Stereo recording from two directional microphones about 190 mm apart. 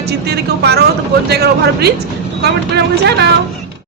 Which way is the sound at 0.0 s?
60° right (ahead or behind).